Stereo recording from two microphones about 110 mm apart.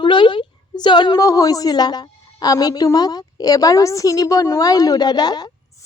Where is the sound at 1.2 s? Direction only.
30° left (ahead or behind).